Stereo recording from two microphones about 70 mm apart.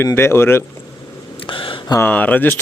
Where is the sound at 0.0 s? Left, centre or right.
Left.